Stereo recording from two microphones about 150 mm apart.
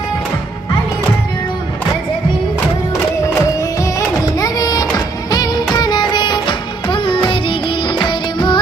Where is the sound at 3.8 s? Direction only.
25° left (ahead or behind).